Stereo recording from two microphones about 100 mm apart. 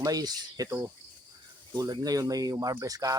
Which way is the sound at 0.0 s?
40° right (ahead or behind).